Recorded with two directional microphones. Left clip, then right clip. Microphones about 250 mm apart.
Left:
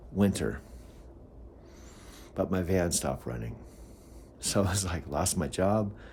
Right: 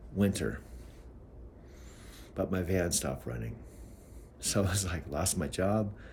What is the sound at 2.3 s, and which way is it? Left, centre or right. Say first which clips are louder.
Speech: left 3 dB; centre.